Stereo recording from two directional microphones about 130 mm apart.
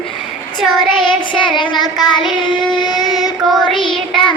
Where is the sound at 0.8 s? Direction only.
40° left (ahead or behind).